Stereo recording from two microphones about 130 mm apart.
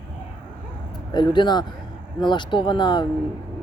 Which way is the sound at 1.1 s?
35° left (ahead or behind).